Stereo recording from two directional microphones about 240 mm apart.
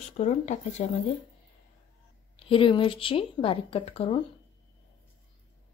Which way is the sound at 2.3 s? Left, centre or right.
Left.